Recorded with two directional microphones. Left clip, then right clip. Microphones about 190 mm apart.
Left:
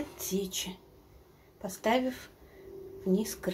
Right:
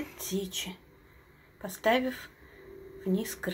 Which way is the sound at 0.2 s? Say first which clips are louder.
Even; centre (ahead or behind).